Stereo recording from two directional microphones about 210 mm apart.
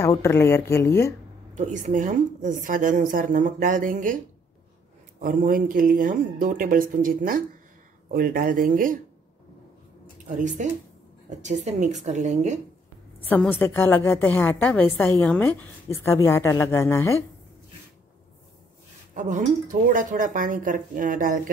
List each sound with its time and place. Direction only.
0.0 s a woman's voice: 15° left (ahead or behind)
1.5 s a woman's voice: 35° right (ahead or behind)
5.2 s a woman's voice: 40° right (ahead or behind)
10.2 s a woman's voice: 35° right (ahead or behind)
13.3 s a woman's voice: 10° left (ahead or behind)
19.1 s a woman's voice: 35° right (ahead or behind)